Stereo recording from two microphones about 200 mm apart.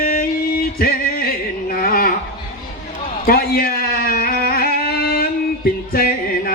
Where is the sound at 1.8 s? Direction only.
45° left (ahead or behind).